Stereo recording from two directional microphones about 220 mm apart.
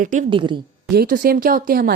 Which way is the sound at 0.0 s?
35° right (ahead or behind).